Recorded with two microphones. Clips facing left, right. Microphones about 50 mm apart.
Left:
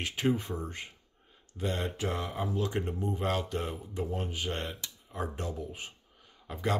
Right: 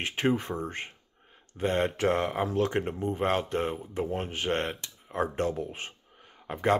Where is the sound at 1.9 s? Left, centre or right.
Right.